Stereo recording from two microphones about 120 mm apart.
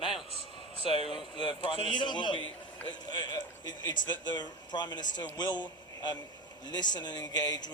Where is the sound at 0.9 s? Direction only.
45° left (ahead or behind).